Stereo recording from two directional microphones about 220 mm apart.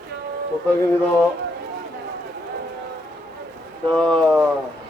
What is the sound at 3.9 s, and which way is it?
Speech, 5° left (ahead or behind).